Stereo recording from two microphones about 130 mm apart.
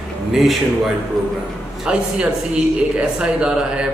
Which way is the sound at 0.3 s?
Centre (ahead or behind).